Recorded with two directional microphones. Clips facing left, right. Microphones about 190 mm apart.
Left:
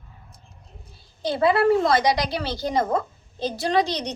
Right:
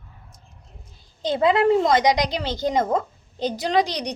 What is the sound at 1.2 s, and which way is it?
A woman's voice, 20° right (ahead or behind).